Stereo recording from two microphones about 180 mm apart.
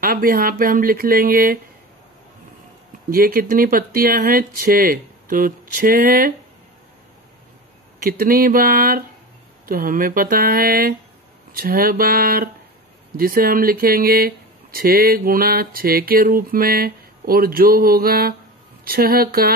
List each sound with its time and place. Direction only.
0.0 s speech: 55° right (ahead or behind)
3.1 s speech: 55° right (ahead or behind)
8.0 s speech: 55° right (ahead or behind)